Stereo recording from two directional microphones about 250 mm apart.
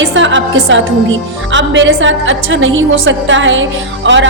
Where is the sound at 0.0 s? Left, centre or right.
Right.